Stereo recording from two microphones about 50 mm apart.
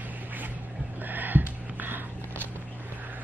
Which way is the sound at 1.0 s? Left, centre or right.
Right.